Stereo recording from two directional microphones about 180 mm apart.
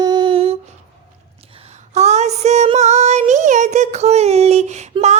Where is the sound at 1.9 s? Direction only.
40° right (ahead or behind).